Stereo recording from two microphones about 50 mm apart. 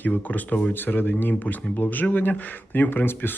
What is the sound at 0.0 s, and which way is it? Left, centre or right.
Speech, left.